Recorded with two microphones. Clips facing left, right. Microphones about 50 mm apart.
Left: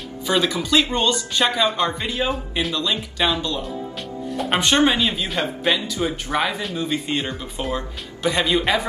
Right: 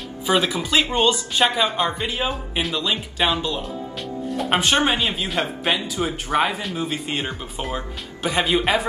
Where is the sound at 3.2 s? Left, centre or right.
Centre.